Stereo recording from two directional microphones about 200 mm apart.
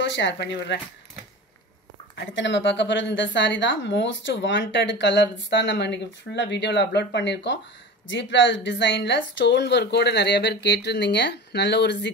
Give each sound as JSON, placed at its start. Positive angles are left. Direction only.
{"t": 0.0, "sound": "a woman's voice", "side_deg": 60}
{"t": 2.1, "sound": "a woman's voice", "side_deg": 65}